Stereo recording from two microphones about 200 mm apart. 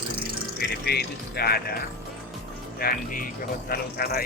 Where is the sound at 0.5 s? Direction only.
55° left (ahead or behind).